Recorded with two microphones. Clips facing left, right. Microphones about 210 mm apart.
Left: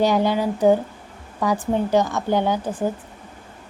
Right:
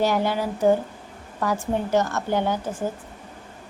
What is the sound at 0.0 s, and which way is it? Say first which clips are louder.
A woman's voice: left 3 dB; 15° left (ahead or behind).